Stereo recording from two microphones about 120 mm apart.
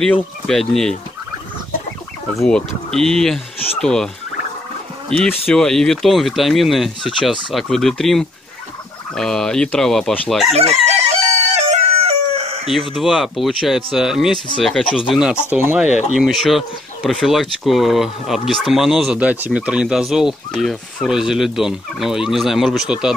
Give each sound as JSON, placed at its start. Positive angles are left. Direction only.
{"t": 0.0, "sound": "speech", "side_deg": 5}
{"t": 2.4, "sound": "speech", "side_deg": 5}
{"t": 5.1, "sound": "speech", "side_deg": 5}
{"t": 10.5, "sound": "crowing", "side_deg": -65}
{"t": 12.9, "sound": "speech", "side_deg": 0}